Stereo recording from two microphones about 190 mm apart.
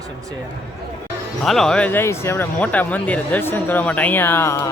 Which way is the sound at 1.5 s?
5° left (ahead or behind).